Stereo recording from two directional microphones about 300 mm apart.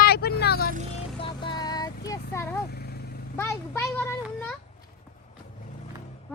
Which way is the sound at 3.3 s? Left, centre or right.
Centre.